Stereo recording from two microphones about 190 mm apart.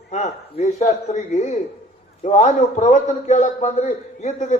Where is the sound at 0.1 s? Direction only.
40° left (ahead or behind).